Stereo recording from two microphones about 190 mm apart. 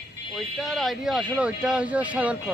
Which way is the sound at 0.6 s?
Centre (ahead or behind).